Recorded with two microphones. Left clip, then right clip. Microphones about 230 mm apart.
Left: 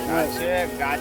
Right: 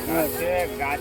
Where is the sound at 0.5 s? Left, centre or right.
Centre.